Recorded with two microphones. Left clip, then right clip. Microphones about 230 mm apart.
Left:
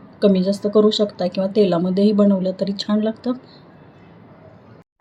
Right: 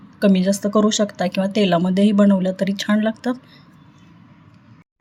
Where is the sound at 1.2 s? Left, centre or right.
Right.